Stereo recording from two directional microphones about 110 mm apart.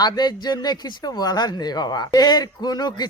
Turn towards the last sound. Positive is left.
turn(degrees=40)  # may be behind; listen again after turning